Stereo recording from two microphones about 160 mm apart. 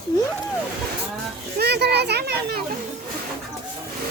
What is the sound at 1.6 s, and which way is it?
Children playing, 90° right.